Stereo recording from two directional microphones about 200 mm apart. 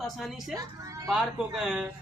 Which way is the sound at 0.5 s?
15° right (ahead or behind).